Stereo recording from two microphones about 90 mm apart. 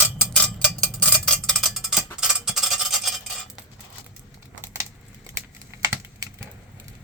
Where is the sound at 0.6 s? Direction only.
15° left (ahead or behind); by 3.1 s centre (ahead or behind).